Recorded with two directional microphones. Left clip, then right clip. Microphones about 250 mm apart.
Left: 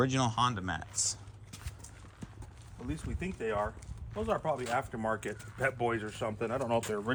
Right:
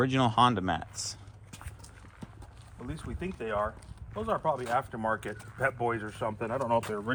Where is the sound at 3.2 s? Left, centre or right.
Centre.